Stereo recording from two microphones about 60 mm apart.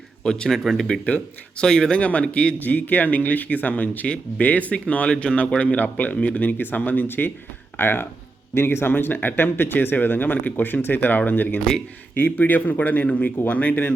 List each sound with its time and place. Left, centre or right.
0.2 s speech: centre
1.0 s speech: centre
2.6 s speech: left